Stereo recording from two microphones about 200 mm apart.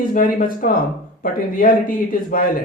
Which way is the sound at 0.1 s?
45° left (ahead or behind).